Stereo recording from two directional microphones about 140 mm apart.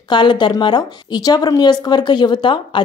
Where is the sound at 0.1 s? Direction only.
35° left (ahead or behind).